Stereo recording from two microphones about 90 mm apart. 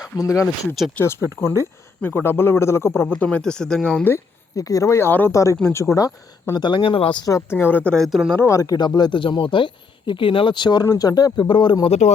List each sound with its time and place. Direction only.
0.0 s a man's voice: 40° left (ahead or behind)
3.1 s speech: 15° left (ahead or behind)
4.5 s speech: 35° left (ahead or behind)
6.5 s speech: 60° left (ahead or behind); by 7.2 s 85° left
7.5 s a man's voice: 25° left (ahead or behind)
7.9 s speech: centre (ahead or behind)
8.4 s speech: 35° left (ahead or behind); by 10.8 s 55° left (ahead or behind)
10.8 s speech: 45° left (ahead or behind)
11.3 s speech: 65° left (ahead or behind)